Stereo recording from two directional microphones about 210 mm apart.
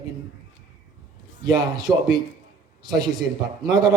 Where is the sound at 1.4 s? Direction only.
20° right (ahead or behind).